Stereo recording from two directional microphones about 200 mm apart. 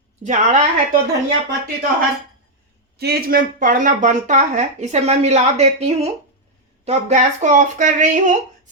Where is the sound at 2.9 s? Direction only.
55° right (ahead or behind).